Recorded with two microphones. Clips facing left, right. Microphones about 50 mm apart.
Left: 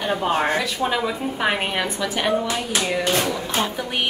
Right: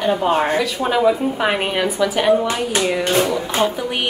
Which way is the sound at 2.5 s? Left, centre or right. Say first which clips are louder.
Right 4 dB; right.